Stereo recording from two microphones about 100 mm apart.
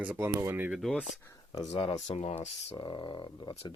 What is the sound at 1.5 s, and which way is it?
Speech, 35° left (ahead or behind).